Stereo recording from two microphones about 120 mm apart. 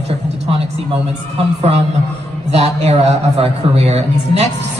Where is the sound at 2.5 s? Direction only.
60° right (ahead or behind).